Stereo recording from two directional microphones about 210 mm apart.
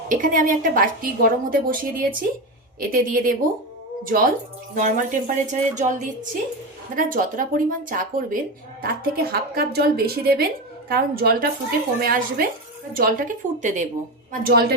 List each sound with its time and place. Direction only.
0.1 s a woman's voice: 40° right (ahead or behind)
14.4 s a woman's voice: 50° right (ahead or behind)